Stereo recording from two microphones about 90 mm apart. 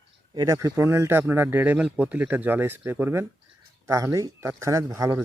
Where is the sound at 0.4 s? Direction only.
35° right (ahead or behind).